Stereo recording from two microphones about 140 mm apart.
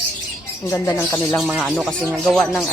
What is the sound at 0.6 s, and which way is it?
Speech, 20° left (ahead or behind).